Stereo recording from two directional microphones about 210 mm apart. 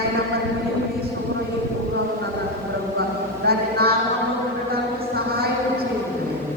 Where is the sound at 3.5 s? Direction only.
50° right (ahead or behind).